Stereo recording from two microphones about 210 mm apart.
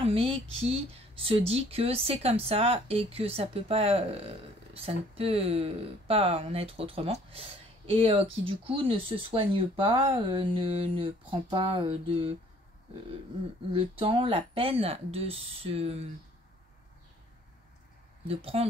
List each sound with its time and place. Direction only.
0.0 s speech: 25° right (ahead or behind)
13.7 s speech: 25° right (ahead or behind)
18.3 s speech: 30° right (ahead or behind)